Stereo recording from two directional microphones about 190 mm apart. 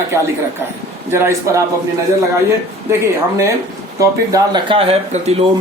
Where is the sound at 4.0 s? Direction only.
20° right (ahead or behind).